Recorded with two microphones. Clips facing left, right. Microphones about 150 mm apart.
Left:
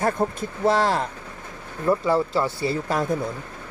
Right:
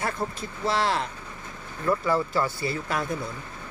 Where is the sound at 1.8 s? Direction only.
25° left (ahead or behind).